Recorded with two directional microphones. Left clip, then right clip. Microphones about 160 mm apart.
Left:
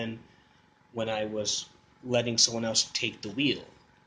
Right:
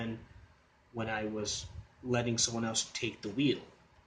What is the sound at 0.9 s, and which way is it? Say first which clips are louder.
Speech: left 6 dB; 20° right (ahead or behind).